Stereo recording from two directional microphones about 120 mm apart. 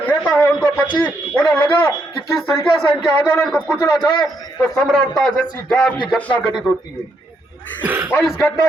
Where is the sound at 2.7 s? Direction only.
5° right (ahead or behind).